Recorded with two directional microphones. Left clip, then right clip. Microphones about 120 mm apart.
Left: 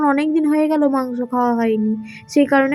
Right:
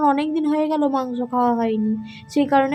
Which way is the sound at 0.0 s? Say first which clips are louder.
Left 2 dB; 20° left (ahead or behind).